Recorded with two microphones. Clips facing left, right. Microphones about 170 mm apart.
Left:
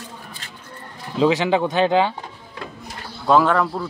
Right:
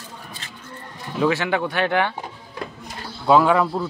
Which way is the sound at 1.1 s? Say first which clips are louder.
Left 3 dB; 20° left (ahead or behind).